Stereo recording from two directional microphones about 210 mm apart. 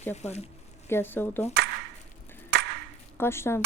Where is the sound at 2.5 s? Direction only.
50° right (ahead or behind).